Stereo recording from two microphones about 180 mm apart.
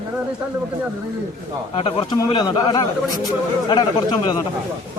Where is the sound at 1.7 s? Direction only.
30° left (ahead or behind).